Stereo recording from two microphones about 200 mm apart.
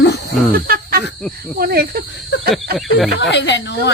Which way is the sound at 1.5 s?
50° right (ahead or behind).